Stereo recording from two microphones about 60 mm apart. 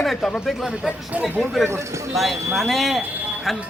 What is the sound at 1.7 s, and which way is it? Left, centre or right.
Speech, right.